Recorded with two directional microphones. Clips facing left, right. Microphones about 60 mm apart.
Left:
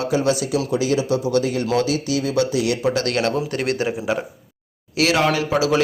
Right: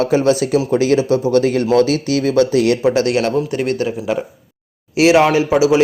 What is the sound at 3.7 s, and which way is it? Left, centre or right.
Speech, centre.